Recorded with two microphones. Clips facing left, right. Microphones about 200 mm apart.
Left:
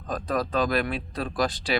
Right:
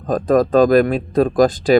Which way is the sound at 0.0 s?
45° right (ahead or behind).